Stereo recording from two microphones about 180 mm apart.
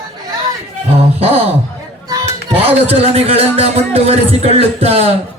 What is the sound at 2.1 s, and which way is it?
Children playing, 20° right (ahead or behind).